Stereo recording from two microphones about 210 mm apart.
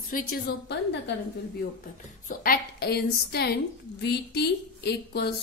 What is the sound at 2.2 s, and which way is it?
A woman's voice, 45° left (ahead or behind).